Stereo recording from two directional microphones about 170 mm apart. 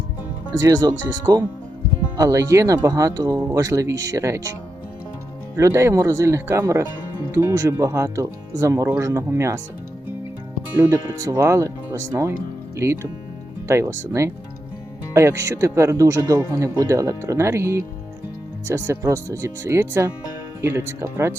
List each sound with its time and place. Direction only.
0.6 s speech: 25° right (ahead or behind)
5.5 s speech: 15° right (ahead or behind)
11.3 s speech: 15° right (ahead or behind)